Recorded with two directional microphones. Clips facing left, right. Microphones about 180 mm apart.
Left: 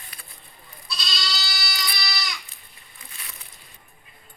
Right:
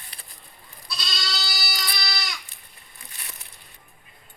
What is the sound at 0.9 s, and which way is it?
Goat, 55° right (ahead or behind).